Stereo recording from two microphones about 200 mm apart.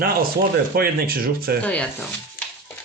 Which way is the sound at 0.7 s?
45° right (ahead or behind).